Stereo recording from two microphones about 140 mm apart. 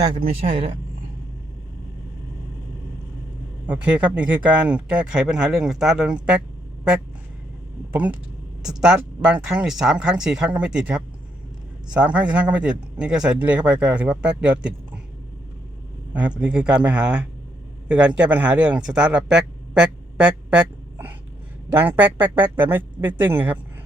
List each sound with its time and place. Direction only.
0.0 s speech: 35° right (ahead or behind)
3.7 s a man's voice: 10° right (ahead or behind)
8.6 s a man's voice: 5° right (ahead or behind)
16.4 s a man's voice: 5° right (ahead or behind)